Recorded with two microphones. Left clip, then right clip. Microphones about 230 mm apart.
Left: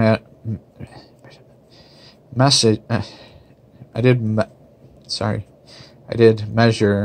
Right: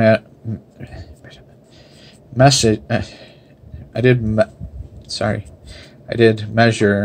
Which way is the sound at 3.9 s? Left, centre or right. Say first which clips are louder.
Right 2 dB; centre.